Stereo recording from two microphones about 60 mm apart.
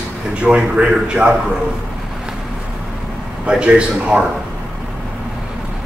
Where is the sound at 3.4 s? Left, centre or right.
Centre.